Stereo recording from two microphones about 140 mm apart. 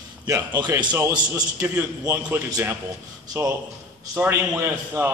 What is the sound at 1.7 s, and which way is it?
A man's voice, 10° right (ahead or behind).